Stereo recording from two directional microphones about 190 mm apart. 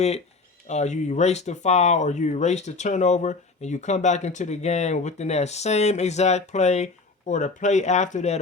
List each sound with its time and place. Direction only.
0.7 s speech: 35° left (ahead or behind)